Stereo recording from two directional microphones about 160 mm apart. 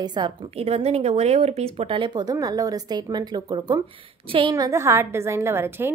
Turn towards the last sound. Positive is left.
turn(degrees=-15)  # may be behind; listen again after turning